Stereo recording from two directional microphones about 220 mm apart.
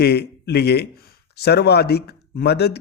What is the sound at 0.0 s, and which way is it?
Speech, 45° left (ahead or behind).